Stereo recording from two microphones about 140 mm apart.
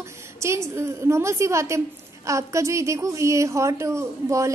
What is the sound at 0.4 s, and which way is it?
A woman's voice, 20° right (ahead or behind).